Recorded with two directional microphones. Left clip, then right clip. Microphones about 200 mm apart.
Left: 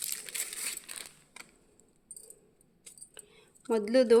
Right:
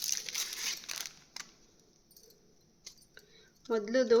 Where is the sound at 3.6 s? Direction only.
40° left (ahead or behind).